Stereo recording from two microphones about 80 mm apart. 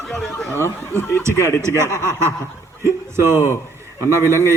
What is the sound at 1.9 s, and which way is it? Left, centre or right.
A man's voice, right.